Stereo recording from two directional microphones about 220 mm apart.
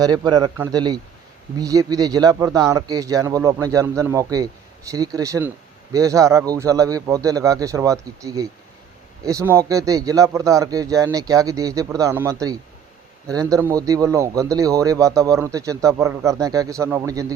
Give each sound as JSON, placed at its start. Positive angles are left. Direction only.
{"t": 0.0, "sound": "a man's voice", "side_deg": -15}